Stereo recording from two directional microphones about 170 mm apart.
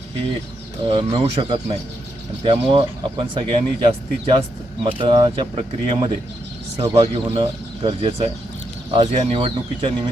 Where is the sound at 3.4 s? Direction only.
35° right (ahead or behind).